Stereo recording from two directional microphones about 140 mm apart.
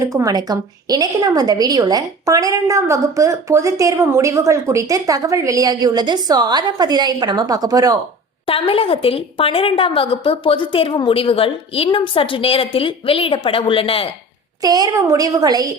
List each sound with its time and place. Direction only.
0.0 s a woman's voice: 25° right (ahead or behind)
8.4 s a woman's voice: 40° left (ahead or behind)
14.6 s a woman's voice: 30° right (ahead or behind)